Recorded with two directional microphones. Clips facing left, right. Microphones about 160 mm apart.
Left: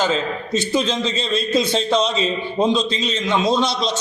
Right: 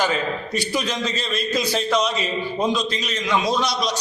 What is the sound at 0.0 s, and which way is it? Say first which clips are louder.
A man's voice: left 2 dB; 20° left (ahead or behind).